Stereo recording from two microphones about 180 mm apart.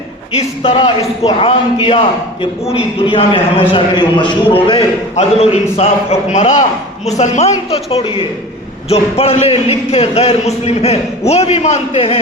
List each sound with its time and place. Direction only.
0.3 s a man's voice: 30° left (ahead or behind)